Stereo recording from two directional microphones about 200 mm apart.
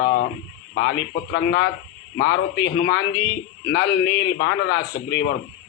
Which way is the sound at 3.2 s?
65° left (ahead or behind).